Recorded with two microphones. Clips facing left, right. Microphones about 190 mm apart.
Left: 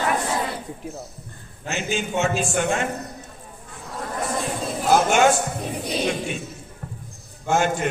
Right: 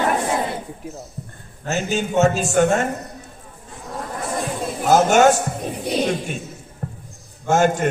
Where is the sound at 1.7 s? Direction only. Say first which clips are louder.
Right 4 dB; 40° right (ahead or behind).